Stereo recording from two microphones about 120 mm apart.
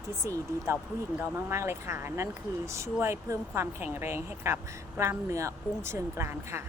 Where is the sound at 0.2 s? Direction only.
25° right (ahead or behind).